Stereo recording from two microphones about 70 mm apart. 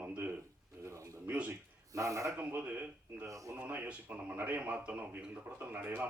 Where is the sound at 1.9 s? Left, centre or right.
Right.